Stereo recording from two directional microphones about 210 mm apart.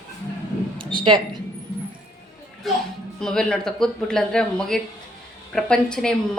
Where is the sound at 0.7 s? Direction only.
25° right (ahead or behind).